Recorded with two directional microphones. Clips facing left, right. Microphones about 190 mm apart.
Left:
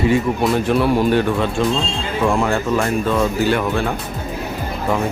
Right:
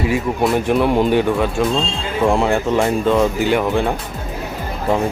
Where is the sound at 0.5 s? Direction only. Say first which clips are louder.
Right 1 dB; 15° right (ahead or behind).